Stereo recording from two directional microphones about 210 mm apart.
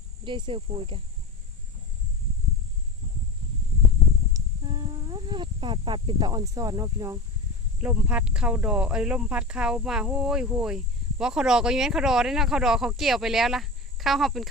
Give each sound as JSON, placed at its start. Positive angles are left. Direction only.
{"t": 0.3, "sound": "speech", "side_deg": -20}
{"t": 4.4, "sound": "a sound", "side_deg": -20}
{"t": 7.8, "sound": "speech", "side_deg": -5}